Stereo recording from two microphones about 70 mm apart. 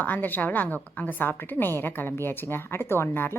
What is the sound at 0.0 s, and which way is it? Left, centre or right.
A woman's voice, left.